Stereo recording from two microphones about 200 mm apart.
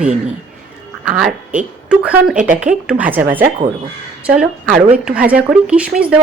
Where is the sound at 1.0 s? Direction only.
5° right (ahead or behind).